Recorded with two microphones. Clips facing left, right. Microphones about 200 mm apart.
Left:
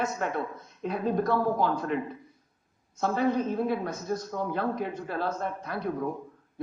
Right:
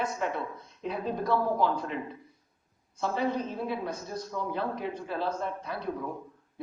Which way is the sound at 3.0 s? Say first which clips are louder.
Left 4 dB; 50° left (ahead or behind).